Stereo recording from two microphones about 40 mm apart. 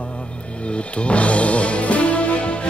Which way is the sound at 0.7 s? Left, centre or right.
Left.